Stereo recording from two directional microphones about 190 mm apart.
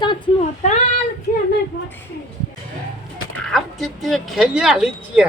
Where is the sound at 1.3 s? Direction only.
40° left (ahead or behind).